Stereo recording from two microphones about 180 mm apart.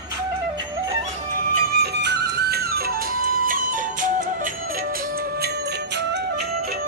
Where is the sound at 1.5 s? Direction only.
65° right (ahead or behind); by 4.5 s 45° right (ahead or behind).